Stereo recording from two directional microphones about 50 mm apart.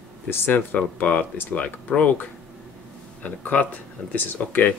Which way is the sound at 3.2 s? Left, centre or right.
Left.